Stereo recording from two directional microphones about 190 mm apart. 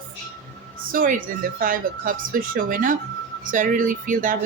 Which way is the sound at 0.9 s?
45° right (ahead or behind).